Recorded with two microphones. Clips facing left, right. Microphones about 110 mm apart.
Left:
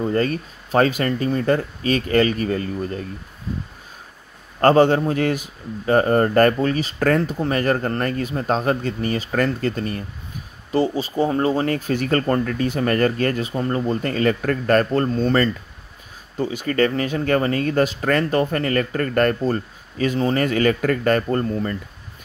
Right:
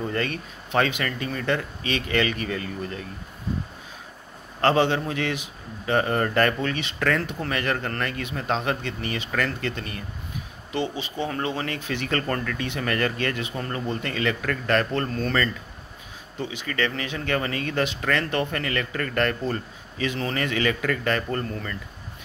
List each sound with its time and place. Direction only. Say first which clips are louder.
0.0 s speech: left 7 dB; 35° left (ahead or behind)
4.6 s speech: left 6 dB; 45° left (ahead or behind)
16.3 s speech: left 8 dB; 40° left (ahead or behind)